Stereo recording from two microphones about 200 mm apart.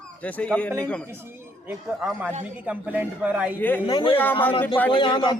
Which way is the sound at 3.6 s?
10° left (ahead or behind).